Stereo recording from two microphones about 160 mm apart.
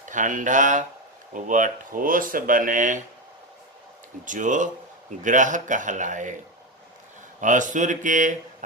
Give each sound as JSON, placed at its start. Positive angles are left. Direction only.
{"t": 0.0, "sound": "speech", "side_deg": -55}
{"t": 4.3, "sound": "speech", "side_deg": -50}
{"t": 7.4, "sound": "speech", "side_deg": -50}